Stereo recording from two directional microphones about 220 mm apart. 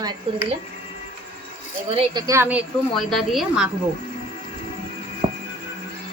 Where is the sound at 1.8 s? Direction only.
25° right (ahead or behind); by 3.6 s centre (ahead or behind).